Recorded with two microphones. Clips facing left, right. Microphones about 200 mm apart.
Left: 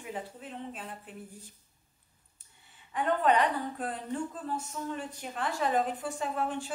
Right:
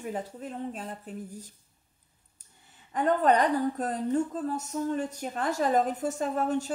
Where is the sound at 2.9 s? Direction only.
40° right (ahead or behind).